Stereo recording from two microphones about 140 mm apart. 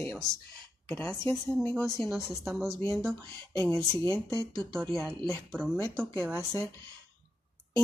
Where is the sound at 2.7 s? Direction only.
20° left (ahead or behind).